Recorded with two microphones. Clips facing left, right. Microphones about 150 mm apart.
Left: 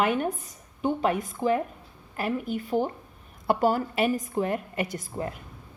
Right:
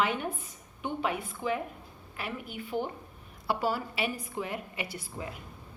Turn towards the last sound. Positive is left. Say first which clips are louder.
# left 7 dB
turn(degrees=45)  # may be behind; listen again after turning